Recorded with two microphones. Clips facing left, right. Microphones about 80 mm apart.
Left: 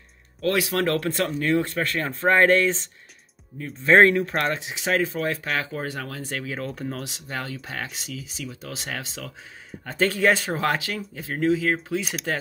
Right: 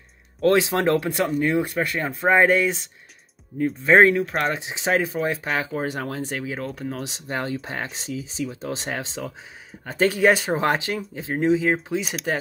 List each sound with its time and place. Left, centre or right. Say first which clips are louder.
0.4 s speech: right 4 dB; right; by 4.5 s centre
4.5 s speech: right 2 dB; right
6.3 s speech: right 1 dB; centre
7.0 s speech: right 4 dB; right